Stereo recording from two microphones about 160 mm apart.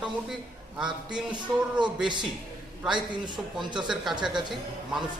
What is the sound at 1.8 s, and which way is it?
Speech, 30° right (ahead or behind).